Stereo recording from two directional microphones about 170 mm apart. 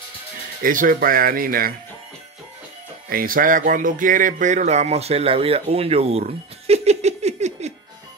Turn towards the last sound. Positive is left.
turn(degrees=-40)  # may be behind; listen again after turning